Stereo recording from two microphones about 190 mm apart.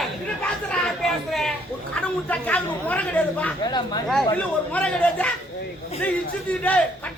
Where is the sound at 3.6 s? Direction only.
20° left (ahead or behind).